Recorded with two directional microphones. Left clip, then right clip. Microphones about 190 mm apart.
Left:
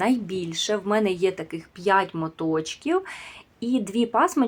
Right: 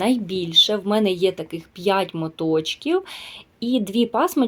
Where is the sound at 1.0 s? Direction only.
Centre (ahead or behind).